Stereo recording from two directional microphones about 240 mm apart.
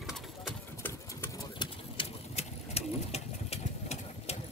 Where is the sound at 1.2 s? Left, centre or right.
Centre.